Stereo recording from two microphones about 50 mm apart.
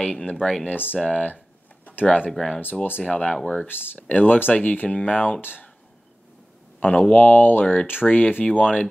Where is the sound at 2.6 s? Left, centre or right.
Left.